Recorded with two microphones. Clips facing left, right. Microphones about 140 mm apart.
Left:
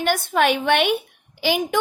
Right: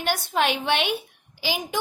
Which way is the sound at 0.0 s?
50° left (ahead or behind).